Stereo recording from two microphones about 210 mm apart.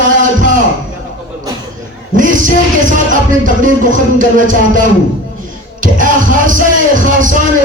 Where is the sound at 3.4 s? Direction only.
40° right (ahead or behind).